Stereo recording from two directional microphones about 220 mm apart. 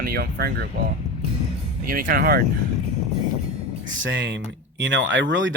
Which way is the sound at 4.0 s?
55° right (ahead or behind).